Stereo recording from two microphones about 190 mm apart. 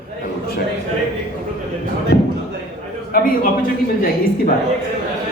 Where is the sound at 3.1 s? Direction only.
50° left (ahead or behind).